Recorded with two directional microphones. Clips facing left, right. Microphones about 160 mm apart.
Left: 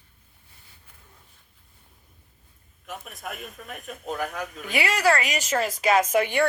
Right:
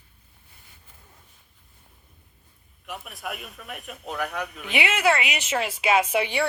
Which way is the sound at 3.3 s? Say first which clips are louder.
Right 1 dB; 45° left (ahead or behind).